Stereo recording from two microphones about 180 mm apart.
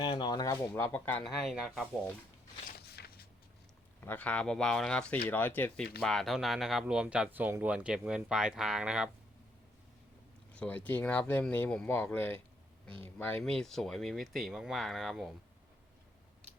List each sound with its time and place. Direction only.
0.0 s speech: 25° left (ahead or behind); by 1.4 s 10° left (ahead or behind)
1.4 s speech: centre (ahead or behind)
2.6 s a sound: 65° left (ahead or behind)
4.0 s speech: 10° left (ahead or behind)
10.5 s speech: 5° left (ahead or behind)
13.4 s speech: 5° left (ahead or behind)